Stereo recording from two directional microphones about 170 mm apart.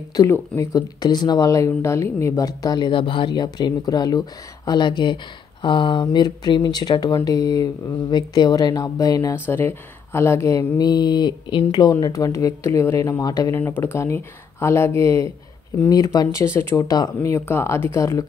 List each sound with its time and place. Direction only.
0.1 s speech: 20° left (ahead or behind)